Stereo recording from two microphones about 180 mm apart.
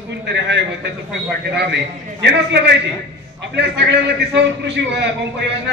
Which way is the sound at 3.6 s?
70° right (ahead or behind).